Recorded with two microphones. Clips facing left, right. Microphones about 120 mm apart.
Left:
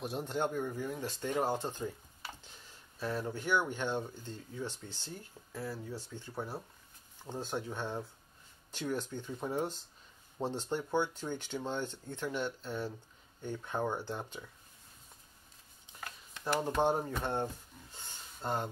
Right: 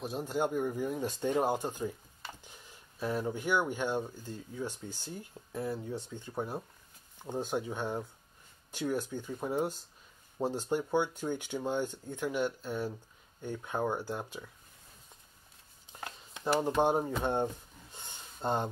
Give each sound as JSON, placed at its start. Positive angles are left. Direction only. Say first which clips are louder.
{"t": 0.0, "sound": "speech", "louder": "right 2 dB", "side_deg": 0}
{"t": 16.0, "sound": "speech", "louder": "right 4 dB", "side_deg": -20}
{"t": 17.9, "sound": "a sound", "louder": "right 3 dB", "side_deg": -20}